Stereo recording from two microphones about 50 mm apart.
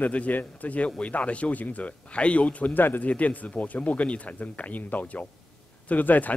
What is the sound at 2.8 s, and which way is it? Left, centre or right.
Speech, left.